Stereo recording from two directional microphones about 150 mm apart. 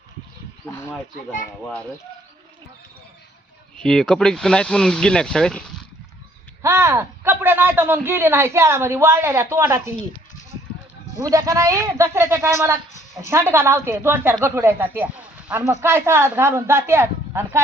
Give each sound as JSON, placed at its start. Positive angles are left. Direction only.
{"t": 0.6, "sound": "speech", "side_deg": 15}
{"t": 3.8, "sound": "speech", "side_deg": 5}
{"t": 6.6, "sound": "speech", "side_deg": -20}
{"t": 11.2, "sound": "speech", "side_deg": -20}